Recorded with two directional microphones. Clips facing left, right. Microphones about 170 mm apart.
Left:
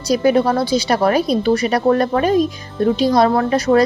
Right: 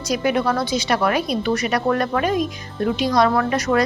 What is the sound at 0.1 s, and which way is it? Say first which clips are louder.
A woman's voice: left 6 dB; 35° left (ahead or behind).